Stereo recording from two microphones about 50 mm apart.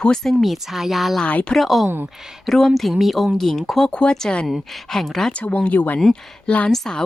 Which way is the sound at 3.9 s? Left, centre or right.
Left.